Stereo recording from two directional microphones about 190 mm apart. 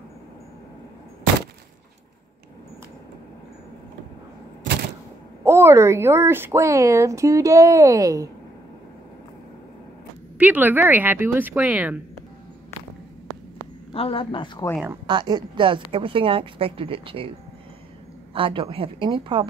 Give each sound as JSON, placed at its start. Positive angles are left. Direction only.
{"t": 5.4, "sound": "a woman's voice", "side_deg": -15}
{"t": 10.3, "sound": "a woman's voice", "side_deg": -10}
{"t": 13.9, "sound": "a man's voice", "side_deg": 30}
{"t": 15.0, "sound": "speech", "side_deg": -20}
{"t": 18.3, "sound": "speech", "side_deg": -25}